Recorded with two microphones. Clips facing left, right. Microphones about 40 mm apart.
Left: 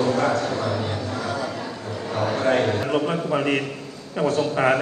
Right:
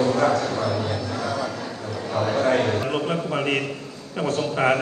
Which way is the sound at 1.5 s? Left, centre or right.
Left.